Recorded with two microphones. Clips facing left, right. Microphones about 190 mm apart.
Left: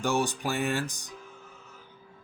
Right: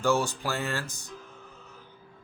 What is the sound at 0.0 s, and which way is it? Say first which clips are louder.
Speech: right 2 dB; 15° left (ahead or behind).